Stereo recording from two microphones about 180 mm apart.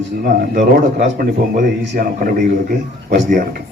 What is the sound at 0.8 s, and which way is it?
A man's voice, 50° right (ahead or behind).